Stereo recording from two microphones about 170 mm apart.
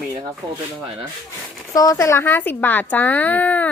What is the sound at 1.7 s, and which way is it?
Speech, 20° left (ahead or behind).